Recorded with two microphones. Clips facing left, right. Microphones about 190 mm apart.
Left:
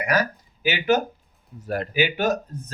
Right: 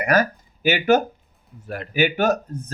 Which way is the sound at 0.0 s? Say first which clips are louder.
Right 4 dB; 50° right (ahead or behind).